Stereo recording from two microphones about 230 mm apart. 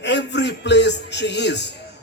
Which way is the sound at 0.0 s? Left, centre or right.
Left.